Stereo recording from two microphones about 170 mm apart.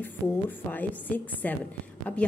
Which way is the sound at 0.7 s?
10° left (ahead or behind).